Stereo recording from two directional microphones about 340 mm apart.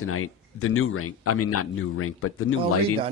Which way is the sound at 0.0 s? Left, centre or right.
Left.